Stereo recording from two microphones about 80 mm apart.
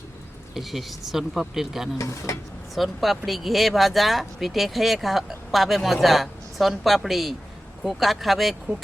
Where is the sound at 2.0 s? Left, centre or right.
Left.